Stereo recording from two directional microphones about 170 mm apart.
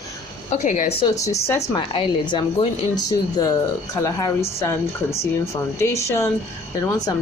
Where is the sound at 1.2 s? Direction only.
20° left (ahead or behind).